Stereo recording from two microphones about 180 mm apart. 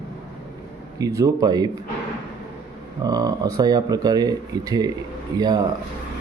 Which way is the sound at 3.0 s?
20° right (ahead or behind).